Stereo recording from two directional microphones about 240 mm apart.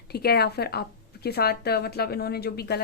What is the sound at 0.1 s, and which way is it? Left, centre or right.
A woman's voice, left.